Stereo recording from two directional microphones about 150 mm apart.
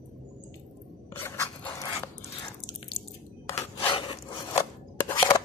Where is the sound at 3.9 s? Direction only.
30° left (ahead or behind).